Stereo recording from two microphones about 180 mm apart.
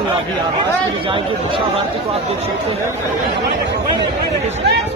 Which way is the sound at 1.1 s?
30° right (ahead or behind).